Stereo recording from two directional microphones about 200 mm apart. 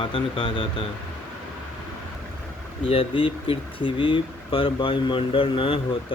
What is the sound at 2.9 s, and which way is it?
Speech, 25° left (ahead or behind).